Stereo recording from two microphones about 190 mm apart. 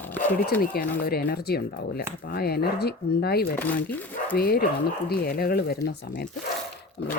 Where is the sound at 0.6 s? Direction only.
50° left (ahead or behind).